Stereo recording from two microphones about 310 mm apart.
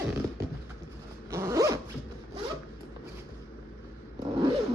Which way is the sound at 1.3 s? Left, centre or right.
Centre.